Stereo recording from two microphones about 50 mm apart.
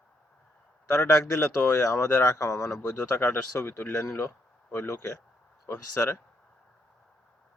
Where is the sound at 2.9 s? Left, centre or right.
Left.